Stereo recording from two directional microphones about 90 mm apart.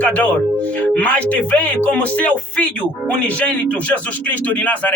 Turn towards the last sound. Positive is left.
turn(degrees=20)  # may be behind; listen again after turning